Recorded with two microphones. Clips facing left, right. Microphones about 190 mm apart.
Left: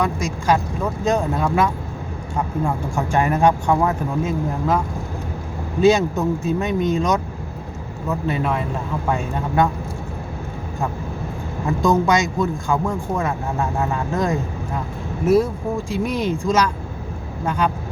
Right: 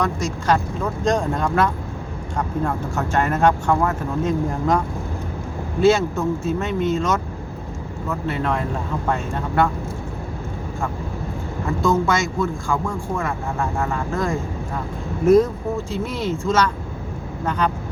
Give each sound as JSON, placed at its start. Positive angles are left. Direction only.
{"t": 0.0, "sound": "speech", "side_deg": 10}
{"t": 5.8, "sound": "speech", "side_deg": 15}
{"t": 8.3, "sound": "speech", "side_deg": 10}
{"t": 11.8, "sound": "a man's voice", "side_deg": 20}
{"t": 15.9, "sound": "speech", "side_deg": 15}